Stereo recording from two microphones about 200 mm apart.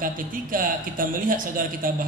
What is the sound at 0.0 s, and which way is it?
A man's voice, 45° right (ahead or behind).